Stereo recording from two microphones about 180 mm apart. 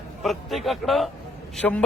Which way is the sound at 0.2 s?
Centre (ahead or behind).